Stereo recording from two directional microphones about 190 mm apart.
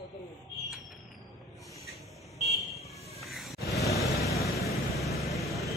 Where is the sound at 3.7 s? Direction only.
15° left (ahead or behind).